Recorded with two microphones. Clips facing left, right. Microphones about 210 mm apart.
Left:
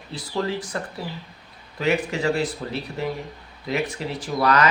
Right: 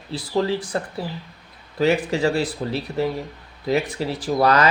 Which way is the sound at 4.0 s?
35° right (ahead or behind).